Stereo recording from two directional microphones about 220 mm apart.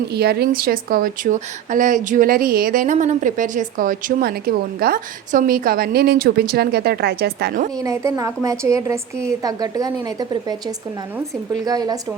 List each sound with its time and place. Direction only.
0.1 s speech: 45° right (ahead or behind)
7.8 s a woman's voice: 15° right (ahead or behind)